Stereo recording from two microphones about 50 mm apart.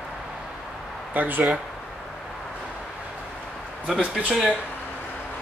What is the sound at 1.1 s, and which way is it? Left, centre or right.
Speech, right.